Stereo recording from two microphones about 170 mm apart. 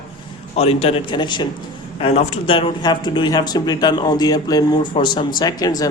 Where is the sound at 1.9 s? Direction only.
40° left (ahead or behind).